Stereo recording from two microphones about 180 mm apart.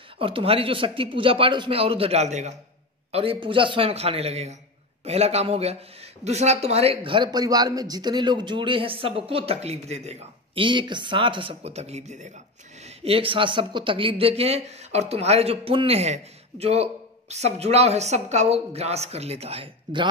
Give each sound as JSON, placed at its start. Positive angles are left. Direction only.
{"t": 0.2, "sound": "speech", "side_deg": -30}